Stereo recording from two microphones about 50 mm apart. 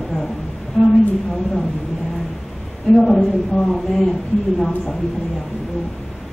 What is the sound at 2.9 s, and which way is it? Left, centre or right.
Speech, centre.